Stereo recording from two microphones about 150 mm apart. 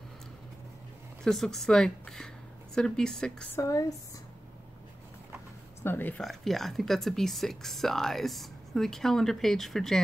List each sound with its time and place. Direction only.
1.2 s a woman's voice: centre (ahead or behind)
3.5 s speech: 20° left (ahead or behind)
5.9 s speech: 10° left (ahead or behind)
6.2 s speech: centre (ahead or behind)